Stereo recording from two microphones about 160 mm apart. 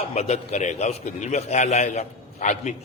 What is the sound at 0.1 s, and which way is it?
A man's voice, 45° left (ahead or behind).